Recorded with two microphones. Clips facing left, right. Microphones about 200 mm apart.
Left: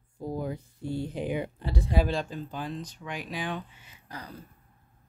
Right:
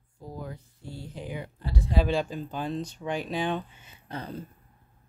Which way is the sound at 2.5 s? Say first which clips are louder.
Right 4 dB; 25° right (ahead or behind).